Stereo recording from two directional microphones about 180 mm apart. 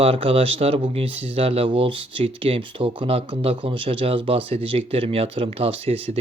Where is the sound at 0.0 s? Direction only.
30° right (ahead or behind).